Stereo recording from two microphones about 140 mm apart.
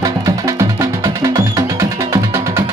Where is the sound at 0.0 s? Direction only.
20° right (ahead or behind).